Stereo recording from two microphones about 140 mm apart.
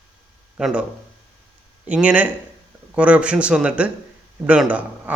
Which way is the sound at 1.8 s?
10° right (ahead or behind).